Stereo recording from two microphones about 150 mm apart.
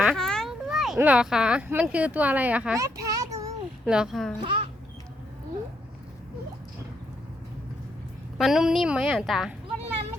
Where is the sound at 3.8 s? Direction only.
5° right (ahead or behind).